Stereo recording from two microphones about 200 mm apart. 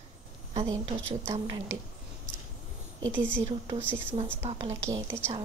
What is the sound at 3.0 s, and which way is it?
Speech, 10° right (ahead or behind).